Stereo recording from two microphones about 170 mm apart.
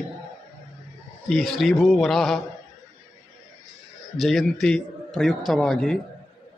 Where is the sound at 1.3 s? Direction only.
Centre (ahead or behind).